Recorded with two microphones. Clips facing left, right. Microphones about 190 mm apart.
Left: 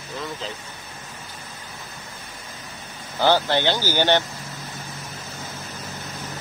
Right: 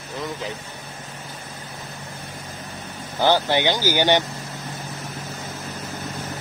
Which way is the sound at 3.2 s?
15° right (ahead or behind).